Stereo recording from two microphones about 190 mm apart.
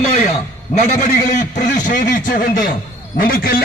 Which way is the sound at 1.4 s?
40° left (ahead or behind).